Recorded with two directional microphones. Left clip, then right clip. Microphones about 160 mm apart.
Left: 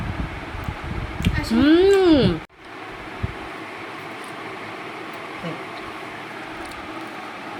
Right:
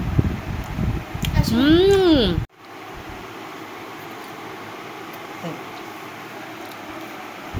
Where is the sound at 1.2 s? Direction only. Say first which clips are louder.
Even; 5° left (ahead or behind).